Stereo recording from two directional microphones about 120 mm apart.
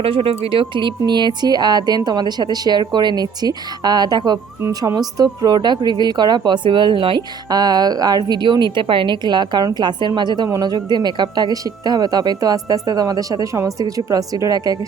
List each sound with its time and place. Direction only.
0.0 s a woman's voice: 50° right (ahead or behind); by 14.8 s 30° right (ahead or behind)